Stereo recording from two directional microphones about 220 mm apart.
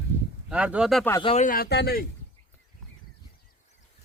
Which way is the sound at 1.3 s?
35° left (ahead or behind).